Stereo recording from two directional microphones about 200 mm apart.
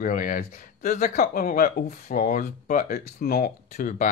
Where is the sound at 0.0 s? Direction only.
45° left (ahead or behind).